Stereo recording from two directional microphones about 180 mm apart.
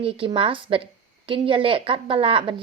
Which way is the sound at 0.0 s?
30° right (ahead or behind).